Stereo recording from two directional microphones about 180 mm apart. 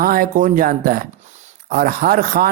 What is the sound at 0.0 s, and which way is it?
A man's voice, 55° right (ahead or behind).